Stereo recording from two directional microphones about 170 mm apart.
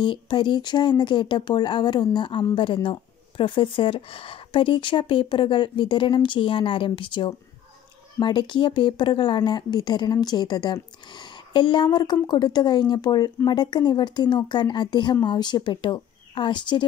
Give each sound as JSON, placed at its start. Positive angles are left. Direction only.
{"t": 0.0, "sound": "speech", "side_deg": 30}